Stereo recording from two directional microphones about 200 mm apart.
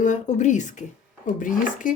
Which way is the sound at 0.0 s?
35° left (ahead or behind).